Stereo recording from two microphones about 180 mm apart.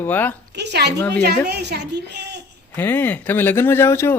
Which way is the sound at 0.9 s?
10° left (ahead or behind).